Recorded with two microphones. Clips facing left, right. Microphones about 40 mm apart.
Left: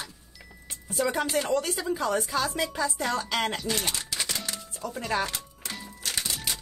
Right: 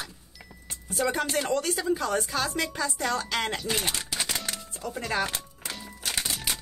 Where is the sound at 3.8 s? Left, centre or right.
Right.